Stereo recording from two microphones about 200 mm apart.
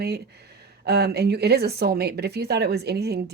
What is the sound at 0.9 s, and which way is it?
Speech, 55° right (ahead or behind).